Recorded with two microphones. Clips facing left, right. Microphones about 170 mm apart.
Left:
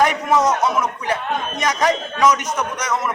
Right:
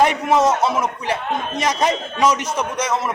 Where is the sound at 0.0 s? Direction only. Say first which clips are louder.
Right 1 dB; 25° right (ahead or behind).